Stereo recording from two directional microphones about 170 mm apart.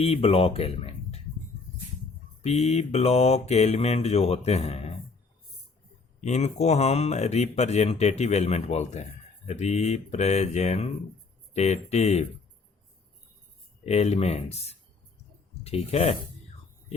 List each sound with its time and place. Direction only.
0.0 s speech: 35° left (ahead or behind)
2.4 s speech: 40° left (ahead or behind)
6.2 s speech: 40° left (ahead or behind)
13.8 s speech: 40° left (ahead or behind)